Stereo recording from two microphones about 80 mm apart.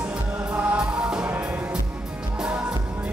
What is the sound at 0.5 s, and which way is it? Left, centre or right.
Music, centre.